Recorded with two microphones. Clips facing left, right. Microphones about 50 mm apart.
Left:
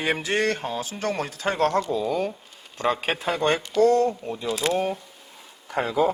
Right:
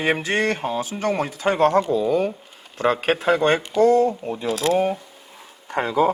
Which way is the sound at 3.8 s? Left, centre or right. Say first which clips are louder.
Right 3 dB; centre.